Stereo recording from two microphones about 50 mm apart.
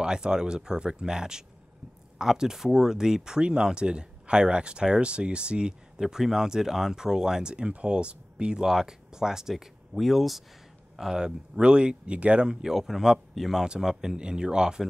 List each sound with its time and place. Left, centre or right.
0.0 s speech: centre
12.6 s speech: centre